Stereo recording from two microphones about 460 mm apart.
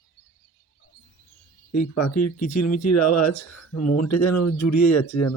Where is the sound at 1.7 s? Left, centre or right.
Left.